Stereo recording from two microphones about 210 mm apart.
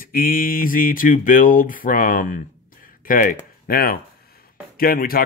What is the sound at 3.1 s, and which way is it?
Speech, 40° left (ahead or behind).